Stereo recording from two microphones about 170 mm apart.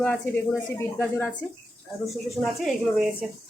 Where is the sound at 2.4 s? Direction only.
Centre (ahead or behind).